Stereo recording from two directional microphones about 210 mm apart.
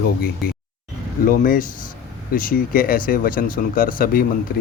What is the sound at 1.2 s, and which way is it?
Speech, 40° left (ahead or behind).